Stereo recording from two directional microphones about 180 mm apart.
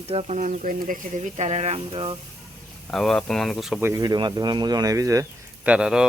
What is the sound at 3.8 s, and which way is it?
Speech, 20° right (ahead or behind).